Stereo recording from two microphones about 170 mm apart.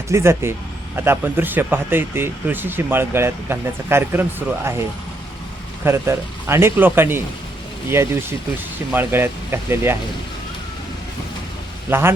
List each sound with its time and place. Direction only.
0.1 s speech: 15° right (ahead or behind)
11.9 s speech: 15° right (ahead or behind)